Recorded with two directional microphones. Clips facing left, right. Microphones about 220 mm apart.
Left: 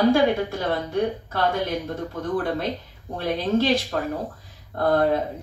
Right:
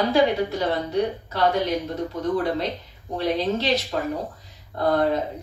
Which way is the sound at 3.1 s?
50° left (ahead or behind).